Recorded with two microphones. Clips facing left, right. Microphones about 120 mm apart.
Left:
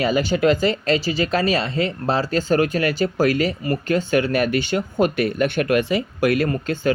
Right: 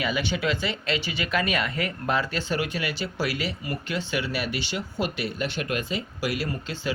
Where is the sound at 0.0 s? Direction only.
40° left (ahead or behind).